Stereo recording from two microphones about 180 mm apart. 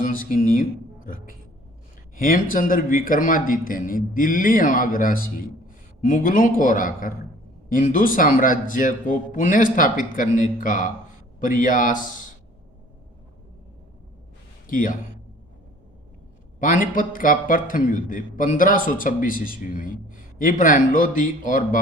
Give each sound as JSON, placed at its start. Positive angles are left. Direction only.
{"t": 0.0, "sound": "a man's voice", "side_deg": 50}
{"t": 14.7, "sound": "a man's voice", "side_deg": 50}
{"t": 16.6, "sound": "a man's voice", "side_deg": 50}